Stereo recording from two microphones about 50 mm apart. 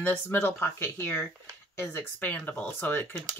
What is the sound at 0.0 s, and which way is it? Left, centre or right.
Speech, left.